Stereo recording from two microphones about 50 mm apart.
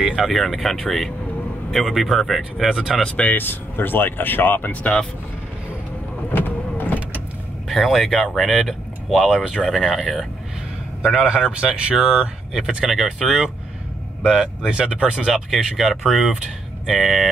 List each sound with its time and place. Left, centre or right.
0.0 s speech: centre
2.7 s speech: centre
3.2 s speech: left
6.3 s vehicle: left
7.6 s speech: centre
11.1 s speech: centre
13.2 s speech: centre
14.2 s speech: centre
15.3 s speech: centre